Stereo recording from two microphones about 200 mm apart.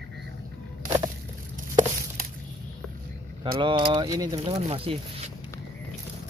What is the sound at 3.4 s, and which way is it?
Speech, 25° right (ahead or behind).